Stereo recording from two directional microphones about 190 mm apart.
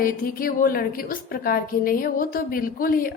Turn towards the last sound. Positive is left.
turn(degrees=50)  # may be behind; listen again after turning